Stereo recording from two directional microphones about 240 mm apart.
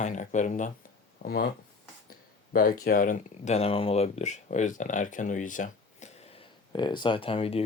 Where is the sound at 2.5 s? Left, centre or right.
Left.